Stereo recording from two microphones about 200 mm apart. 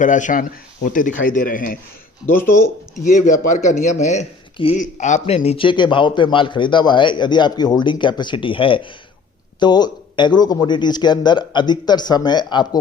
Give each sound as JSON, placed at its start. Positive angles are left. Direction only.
{"t": 0.0, "sound": "a man's voice", "side_deg": 40}
{"t": 2.2, "sound": "speech", "side_deg": 10}
{"t": 3.0, "sound": "a man's voice", "side_deg": 40}